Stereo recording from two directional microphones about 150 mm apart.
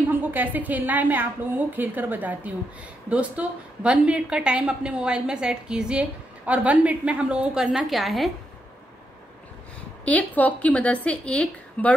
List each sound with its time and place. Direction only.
0.1 s a woman's voice: 10° right (ahead or behind)
10.0 s a woman's voice: 10° left (ahead or behind)